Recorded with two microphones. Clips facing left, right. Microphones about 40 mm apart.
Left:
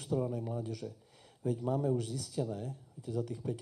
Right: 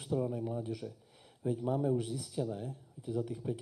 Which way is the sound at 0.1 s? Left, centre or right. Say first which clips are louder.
Even; centre.